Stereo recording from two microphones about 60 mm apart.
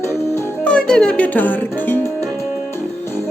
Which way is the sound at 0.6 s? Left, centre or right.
Centre.